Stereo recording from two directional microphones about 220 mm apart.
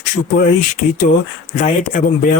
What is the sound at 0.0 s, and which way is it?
A man's voice, 35° left (ahead or behind).